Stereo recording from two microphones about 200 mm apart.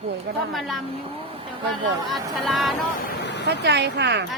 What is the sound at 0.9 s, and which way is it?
Speech, 30° right (ahead or behind).